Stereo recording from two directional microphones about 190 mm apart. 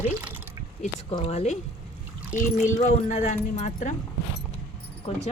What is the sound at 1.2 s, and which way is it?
Speech, 35° left (ahead or behind).